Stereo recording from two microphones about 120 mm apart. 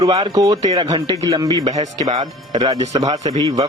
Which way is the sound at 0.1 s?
45° right (ahead or behind).